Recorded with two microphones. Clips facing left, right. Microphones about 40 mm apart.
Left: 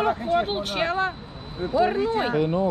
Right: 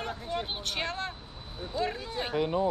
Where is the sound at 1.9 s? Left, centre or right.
Left.